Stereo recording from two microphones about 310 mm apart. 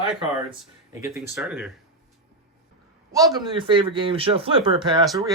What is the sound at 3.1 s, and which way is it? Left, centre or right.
Speech, centre.